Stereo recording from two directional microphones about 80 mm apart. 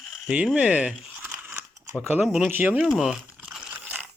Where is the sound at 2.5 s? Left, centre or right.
Right.